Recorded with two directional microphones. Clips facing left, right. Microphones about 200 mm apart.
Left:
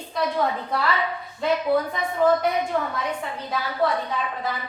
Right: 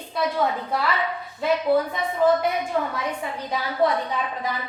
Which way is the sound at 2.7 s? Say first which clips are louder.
Even; 15° right (ahead or behind).